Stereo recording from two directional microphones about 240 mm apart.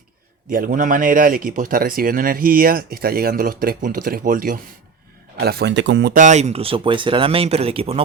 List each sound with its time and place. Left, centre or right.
0.5 s speech: right